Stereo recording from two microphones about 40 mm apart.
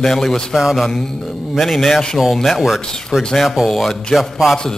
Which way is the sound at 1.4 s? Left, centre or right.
Centre.